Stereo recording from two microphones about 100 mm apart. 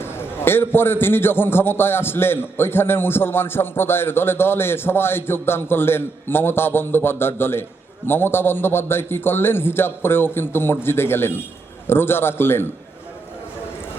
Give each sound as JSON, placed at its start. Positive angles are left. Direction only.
{"t": 0.0, "sound": "a man's voice", "side_deg": 25}